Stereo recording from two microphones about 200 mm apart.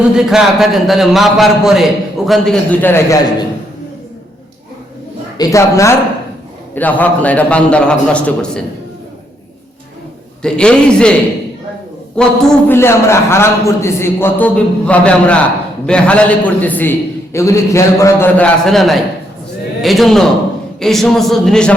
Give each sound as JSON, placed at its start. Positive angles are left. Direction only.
{"t": 0.1, "sound": "a man's voice", "side_deg": -5}
{"t": 5.4, "sound": "a man's voice", "side_deg": 15}
{"t": 10.4, "sound": "a man's voice", "side_deg": 5}
{"t": 12.1, "sound": "a man's voice", "side_deg": 5}